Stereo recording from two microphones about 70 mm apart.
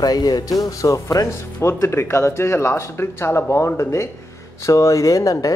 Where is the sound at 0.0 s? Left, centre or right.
Left.